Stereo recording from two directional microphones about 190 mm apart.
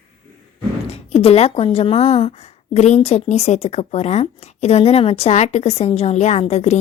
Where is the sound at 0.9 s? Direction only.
30° left (ahead or behind).